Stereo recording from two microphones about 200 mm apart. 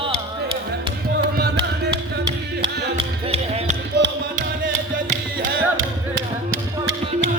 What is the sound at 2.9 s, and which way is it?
Music, 30° right (ahead or behind).